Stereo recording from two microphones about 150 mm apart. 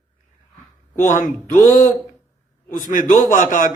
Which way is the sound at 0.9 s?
60° left (ahead or behind).